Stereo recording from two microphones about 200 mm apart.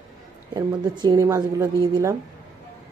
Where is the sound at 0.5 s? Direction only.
20° right (ahead or behind).